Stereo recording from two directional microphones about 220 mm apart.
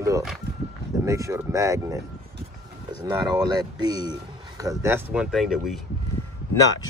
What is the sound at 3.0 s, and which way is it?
Speech, 15° right (ahead or behind).